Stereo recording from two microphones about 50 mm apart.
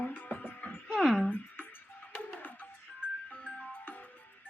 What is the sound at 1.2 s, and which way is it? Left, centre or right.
Music, left.